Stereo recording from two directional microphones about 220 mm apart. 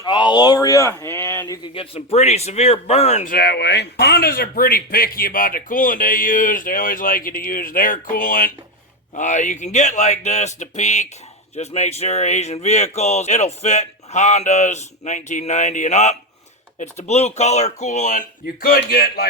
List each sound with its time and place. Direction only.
0.0 s speech: 20° left (ahead or behind)
1.5 s a man's voice: 20° left (ahead or behind)
3.3 s speech: 50° left (ahead or behind)